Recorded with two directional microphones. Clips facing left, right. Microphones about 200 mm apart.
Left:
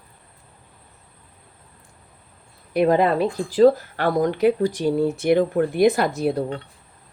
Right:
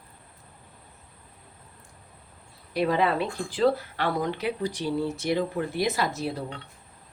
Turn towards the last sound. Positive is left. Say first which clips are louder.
# left 9 dB
turn(degrees=50)  # may be behind; listen again after turning